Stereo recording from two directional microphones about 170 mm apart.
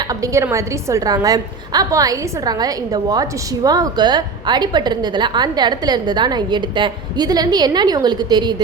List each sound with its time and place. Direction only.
0.1 s a woman's voice: 20° right (ahead or behind)